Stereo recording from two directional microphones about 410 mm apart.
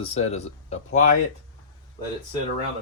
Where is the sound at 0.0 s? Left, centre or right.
Centre.